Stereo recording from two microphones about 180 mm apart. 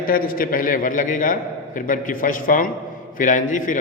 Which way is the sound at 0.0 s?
55° left (ahead or behind).